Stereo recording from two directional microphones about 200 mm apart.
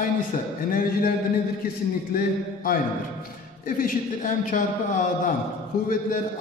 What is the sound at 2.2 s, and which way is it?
A man's voice, 45° left (ahead or behind).